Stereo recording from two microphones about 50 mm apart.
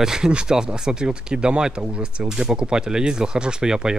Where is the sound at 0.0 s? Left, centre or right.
Centre.